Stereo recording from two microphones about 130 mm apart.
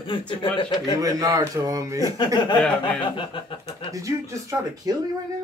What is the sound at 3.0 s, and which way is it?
Speech, 40° left (ahead or behind).